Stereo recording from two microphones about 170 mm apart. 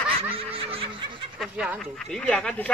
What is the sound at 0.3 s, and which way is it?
Laughter, 35° right (ahead or behind).